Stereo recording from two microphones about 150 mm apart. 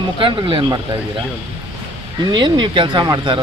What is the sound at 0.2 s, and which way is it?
Speech, 35° right (ahead or behind).